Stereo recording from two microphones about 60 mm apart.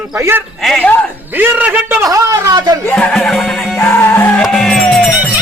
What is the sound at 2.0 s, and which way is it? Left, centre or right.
Speech, right.